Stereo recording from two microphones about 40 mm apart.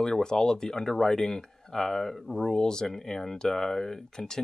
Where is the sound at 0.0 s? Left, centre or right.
Centre.